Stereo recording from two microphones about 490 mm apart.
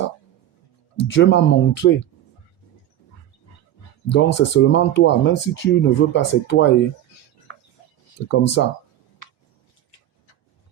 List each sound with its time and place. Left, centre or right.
0.9 s speech: left
4.1 s speech: left
8.3 s speech: left